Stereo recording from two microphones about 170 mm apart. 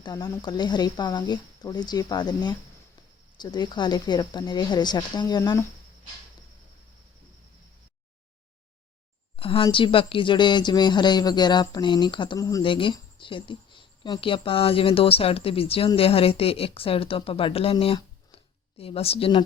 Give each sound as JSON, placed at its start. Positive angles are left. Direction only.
{"t": 0.0, "sound": "speech", "side_deg": 20}
{"t": 9.3, "sound": "a sound", "side_deg": 30}
{"t": 9.6, "sound": "speech", "side_deg": 30}
{"t": 12.6, "sound": "speech", "side_deg": 30}